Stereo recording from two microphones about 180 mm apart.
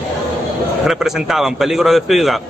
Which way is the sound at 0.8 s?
Centre (ahead or behind).